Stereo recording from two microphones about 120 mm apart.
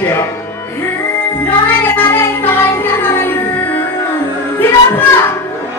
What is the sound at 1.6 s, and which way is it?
Music, 15° left (ahead or behind).